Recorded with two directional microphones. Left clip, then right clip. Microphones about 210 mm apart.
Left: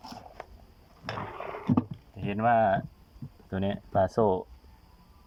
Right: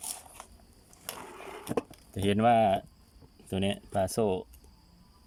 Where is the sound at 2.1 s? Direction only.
25° right (ahead or behind); by 4.4 s 5° right (ahead or behind).